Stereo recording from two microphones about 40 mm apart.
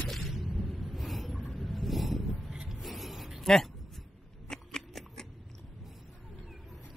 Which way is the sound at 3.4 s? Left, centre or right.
Centre.